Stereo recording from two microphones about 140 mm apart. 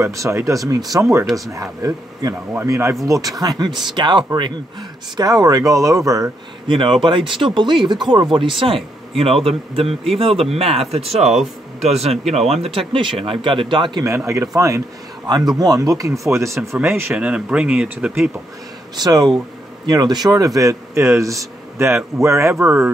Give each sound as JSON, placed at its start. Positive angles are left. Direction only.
{"t": 0.0, "sound": "speech", "side_deg": -20}
{"t": 6.8, "sound": "speech", "side_deg": -35}
{"t": 14.0, "sound": "speech", "side_deg": -20}
{"t": 18.9, "sound": "speech", "side_deg": -30}